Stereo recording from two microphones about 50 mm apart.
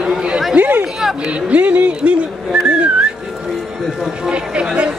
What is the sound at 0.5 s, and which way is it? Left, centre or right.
Chatter, right.